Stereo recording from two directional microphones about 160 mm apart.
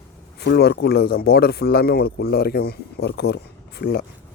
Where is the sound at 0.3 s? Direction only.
85° left.